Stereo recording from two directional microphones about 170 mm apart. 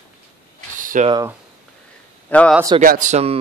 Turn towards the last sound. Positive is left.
turn(degrees=-40)  # may be behind; listen again after turning